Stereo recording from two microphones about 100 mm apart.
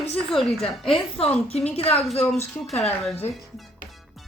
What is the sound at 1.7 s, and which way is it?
Speech, 80° left.